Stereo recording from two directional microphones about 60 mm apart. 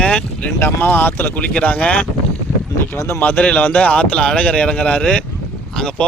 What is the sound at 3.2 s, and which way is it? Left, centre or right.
Speech, left.